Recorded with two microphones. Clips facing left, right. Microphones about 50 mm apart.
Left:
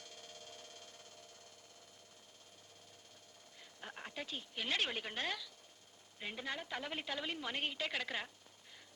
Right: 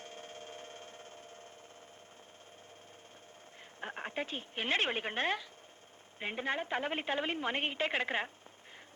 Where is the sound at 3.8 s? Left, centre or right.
Right.